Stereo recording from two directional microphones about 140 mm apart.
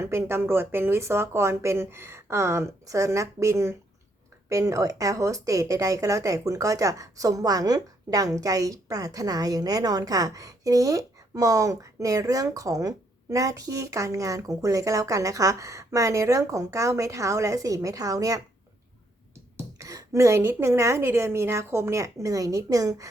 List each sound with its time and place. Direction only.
0.0 s a woman's voice: 15° right (ahead or behind)
19.5 s a woman's voice: 20° right (ahead or behind)